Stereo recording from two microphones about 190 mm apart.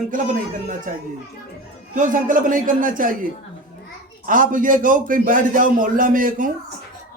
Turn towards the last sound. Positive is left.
turn(degrees=-45)  # may be behind; listen again after turning